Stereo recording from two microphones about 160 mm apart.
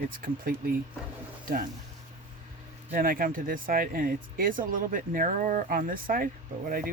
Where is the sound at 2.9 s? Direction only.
65° right (ahead or behind).